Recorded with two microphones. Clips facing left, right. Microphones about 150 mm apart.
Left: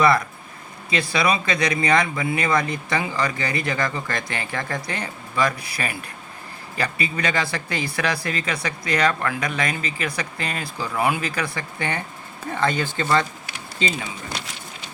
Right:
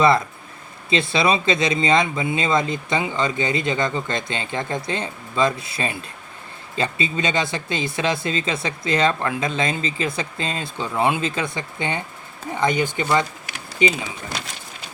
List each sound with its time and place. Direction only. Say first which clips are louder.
0.0 s speech: right 1 dB; 20° right (ahead or behind)